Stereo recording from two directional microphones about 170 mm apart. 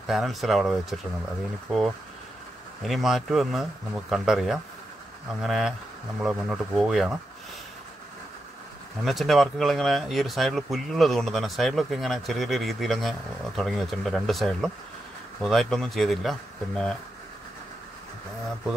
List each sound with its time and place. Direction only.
0.0 s speech: centre (ahead or behind)
2.8 s speech: centre (ahead or behind)
9.0 s speech: centre (ahead or behind)